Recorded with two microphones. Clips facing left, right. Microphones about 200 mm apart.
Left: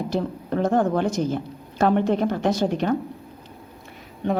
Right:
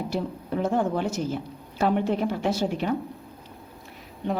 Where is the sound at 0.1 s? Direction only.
10° right (ahead or behind).